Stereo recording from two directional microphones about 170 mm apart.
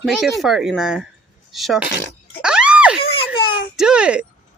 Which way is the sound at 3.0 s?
30° left (ahead or behind).